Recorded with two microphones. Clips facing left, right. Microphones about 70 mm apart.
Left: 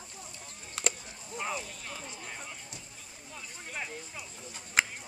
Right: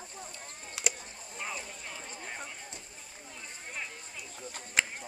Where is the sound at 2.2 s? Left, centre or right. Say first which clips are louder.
Right 2 dB; right.